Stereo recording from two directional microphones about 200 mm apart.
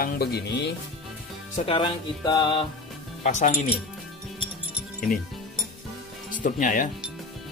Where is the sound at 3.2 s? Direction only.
35° left (ahead or behind).